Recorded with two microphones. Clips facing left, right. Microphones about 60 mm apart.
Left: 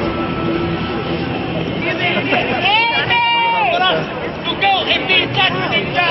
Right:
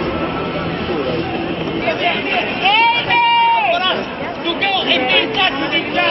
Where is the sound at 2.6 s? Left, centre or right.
Centre.